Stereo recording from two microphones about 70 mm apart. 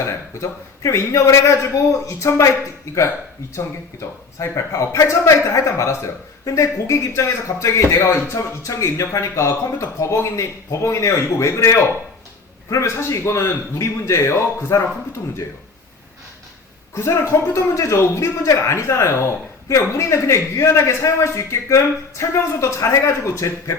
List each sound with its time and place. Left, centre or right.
0.0 s a man's voice: left
4.4 s a man's voice: left
16.9 s a man's voice: left